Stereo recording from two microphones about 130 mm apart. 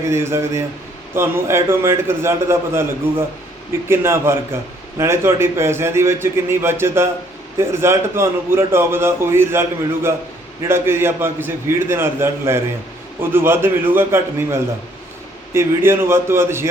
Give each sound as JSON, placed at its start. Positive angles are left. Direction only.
{"t": 0.1, "sound": "a man's voice", "side_deg": -20}